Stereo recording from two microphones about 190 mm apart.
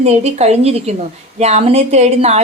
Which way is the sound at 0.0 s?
35° right (ahead or behind).